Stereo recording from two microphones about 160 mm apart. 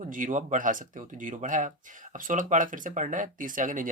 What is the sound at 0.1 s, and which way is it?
Speech, 55° right (ahead or behind).